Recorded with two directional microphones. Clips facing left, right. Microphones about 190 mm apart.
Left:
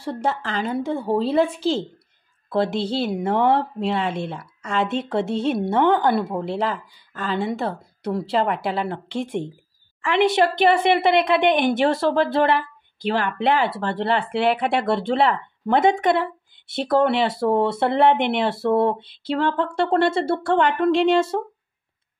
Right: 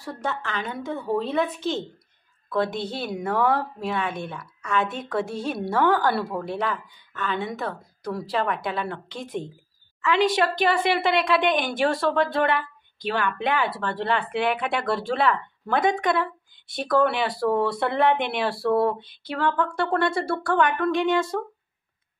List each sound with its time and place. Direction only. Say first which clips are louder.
0.0 s a woman's voice: left 5 dB; 30° left (ahead or behind)